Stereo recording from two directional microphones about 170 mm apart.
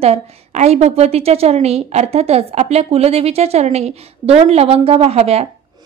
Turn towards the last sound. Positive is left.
turn(degrees=-35)  # may be behind; listen again after turning